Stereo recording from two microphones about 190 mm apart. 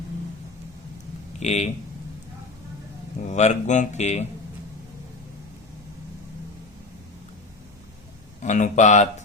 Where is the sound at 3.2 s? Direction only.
40° left (ahead or behind).